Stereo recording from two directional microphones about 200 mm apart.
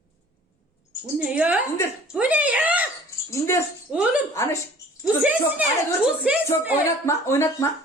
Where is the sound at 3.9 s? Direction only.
5° right (ahead or behind).